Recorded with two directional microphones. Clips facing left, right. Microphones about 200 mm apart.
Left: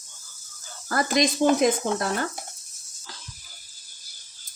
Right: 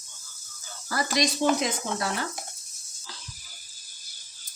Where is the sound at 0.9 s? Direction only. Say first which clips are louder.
Left 4 dB; 50° left (ahead or behind).